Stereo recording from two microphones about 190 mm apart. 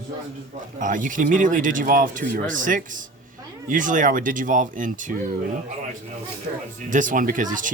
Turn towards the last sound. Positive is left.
turn(degrees=-45)  # may be behind; listen again after turning